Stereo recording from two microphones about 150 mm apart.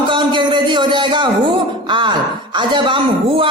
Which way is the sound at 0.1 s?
30° right (ahead or behind).